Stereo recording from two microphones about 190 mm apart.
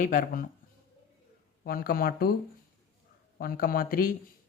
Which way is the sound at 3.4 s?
50° left (ahead or behind).